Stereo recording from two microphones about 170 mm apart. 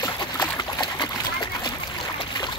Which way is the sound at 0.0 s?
25° left (ahead or behind).